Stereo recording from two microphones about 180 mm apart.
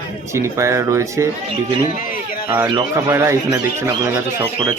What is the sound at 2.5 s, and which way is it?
A man's voice, 20° right (ahead or behind).